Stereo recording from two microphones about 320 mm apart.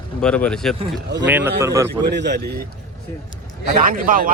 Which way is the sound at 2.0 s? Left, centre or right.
Right.